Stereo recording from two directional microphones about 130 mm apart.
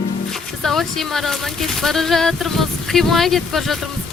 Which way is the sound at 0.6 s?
Centre (ahead or behind).